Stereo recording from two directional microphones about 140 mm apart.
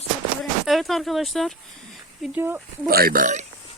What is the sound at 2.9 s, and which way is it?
Speech, 90° right.